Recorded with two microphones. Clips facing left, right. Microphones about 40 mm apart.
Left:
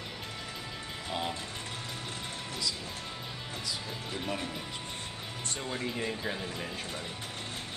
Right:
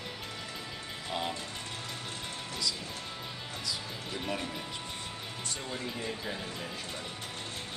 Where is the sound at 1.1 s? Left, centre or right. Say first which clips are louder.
Even; centre.